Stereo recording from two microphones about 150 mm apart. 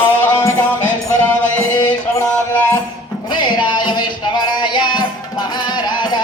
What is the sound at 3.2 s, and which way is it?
Music, 30° left (ahead or behind).